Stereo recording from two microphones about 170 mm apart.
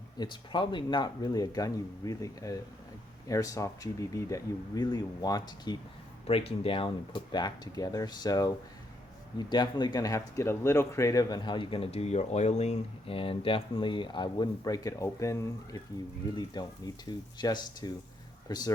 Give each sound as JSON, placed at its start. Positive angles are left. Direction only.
{"t": 0.2, "sound": "speech", "side_deg": 25}
{"t": 6.2, "sound": "speech", "side_deg": 35}